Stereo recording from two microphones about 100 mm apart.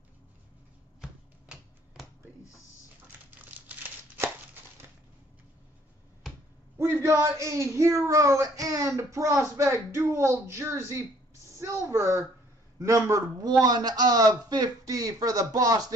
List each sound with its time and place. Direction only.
3.3 s crumpling: 15° right (ahead or behind)
6.8 s speech: 25° right (ahead or behind)